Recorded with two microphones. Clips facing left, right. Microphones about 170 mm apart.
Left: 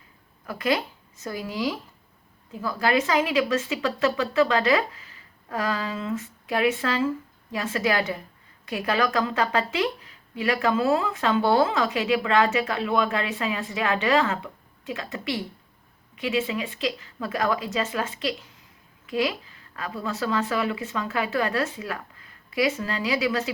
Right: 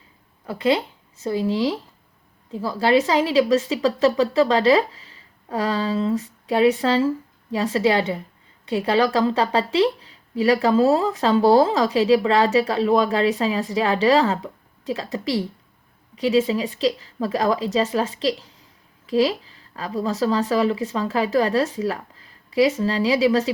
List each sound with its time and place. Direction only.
0.4 s a woman's voice: 30° right (ahead or behind)